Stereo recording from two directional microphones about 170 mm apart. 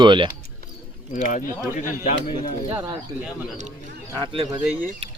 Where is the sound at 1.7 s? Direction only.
45° left (ahead or behind).